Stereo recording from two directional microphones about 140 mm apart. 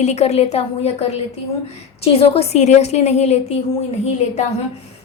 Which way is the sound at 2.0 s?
45° left (ahead or behind).